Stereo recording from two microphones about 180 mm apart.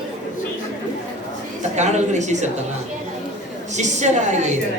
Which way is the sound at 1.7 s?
40° right (ahead or behind).